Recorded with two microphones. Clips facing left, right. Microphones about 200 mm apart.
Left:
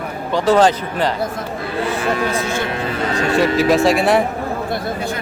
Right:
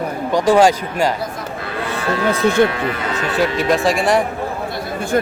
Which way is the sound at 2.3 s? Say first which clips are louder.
Right 5 dB; 60° right (ahead or behind).